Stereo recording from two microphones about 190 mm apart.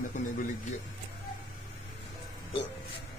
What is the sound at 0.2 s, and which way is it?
Speech, 40° left (ahead or behind).